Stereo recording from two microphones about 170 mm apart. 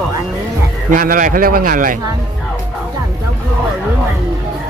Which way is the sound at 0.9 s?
55° right (ahead or behind).